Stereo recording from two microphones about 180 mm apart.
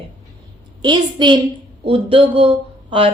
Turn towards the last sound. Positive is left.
turn(degrees=-30)  # may be behind; listen again after turning